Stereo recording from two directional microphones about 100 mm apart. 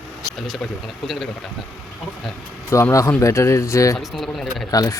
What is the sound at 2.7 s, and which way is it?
Speech, 30° left (ahead or behind).